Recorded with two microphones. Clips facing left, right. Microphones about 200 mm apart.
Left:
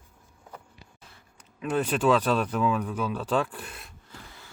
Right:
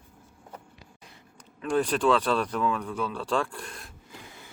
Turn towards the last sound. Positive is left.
turn(degrees=5)  # may be behind; listen again after turning